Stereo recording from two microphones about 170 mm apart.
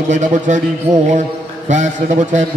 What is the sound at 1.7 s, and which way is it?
Speech, 45° right (ahead or behind).